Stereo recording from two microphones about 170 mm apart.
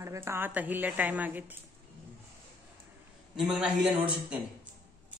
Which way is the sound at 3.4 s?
5° right (ahead or behind).